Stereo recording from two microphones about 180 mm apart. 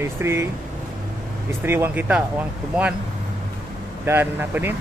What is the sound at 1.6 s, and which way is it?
Speech, 10° right (ahead or behind).